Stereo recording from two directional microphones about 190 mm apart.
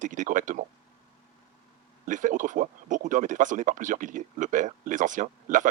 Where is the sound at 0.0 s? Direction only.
40° right (ahead or behind).